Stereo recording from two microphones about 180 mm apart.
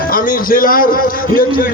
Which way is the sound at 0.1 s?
50° left (ahead or behind).